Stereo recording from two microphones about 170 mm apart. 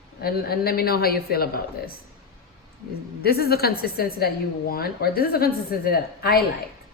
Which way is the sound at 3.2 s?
65° left (ahead or behind).